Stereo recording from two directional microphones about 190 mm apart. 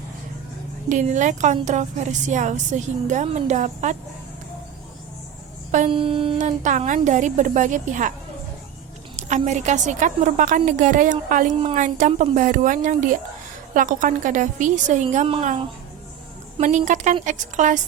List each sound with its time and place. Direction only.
0.9 s a woman's voice: 40° right (ahead or behind)
5.9 s a sound: 30° right (ahead or behind)
6.4 s a woman's voice: 40° right (ahead or behind)
9.1 s a woman's voice: 40° right (ahead or behind)
16.6 s a woman's voice: 40° right (ahead or behind)